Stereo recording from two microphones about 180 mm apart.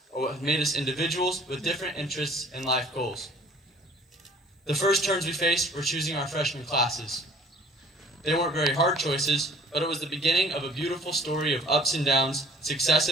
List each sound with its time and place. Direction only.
0.5 s a man's voice: centre (ahead or behind)
4.7 s a man's voice: centre (ahead or behind)